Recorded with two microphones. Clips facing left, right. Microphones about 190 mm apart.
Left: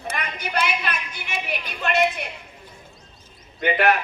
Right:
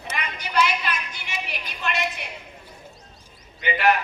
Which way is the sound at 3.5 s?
50° left (ahead or behind).